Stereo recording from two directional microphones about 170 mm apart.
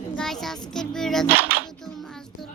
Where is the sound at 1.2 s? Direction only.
10° right (ahead or behind).